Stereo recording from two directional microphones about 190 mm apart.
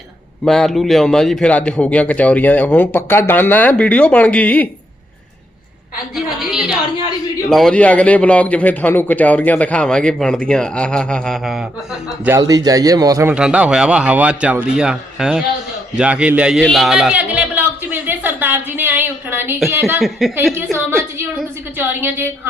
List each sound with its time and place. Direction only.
0.4 s a man's voice: centre (ahead or behind)
6.4 s a man's voice: 5° right (ahead or behind)
12.2 s speech: 15° right (ahead or behind)
13.3 s a man's voice: 5° right (ahead or behind)
16.0 s a sound: 5° right (ahead or behind)
20.0 s a man's voice: centre (ahead or behind)
20.3 s speech: 10° right (ahead or behind)
20.7 s a sound: 15° right (ahead or behind)
21.8 s speech: 10° right (ahead or behind)